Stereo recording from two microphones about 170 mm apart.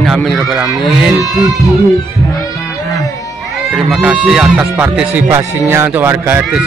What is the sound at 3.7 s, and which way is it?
A man's voice, 5° right (ahead or behind).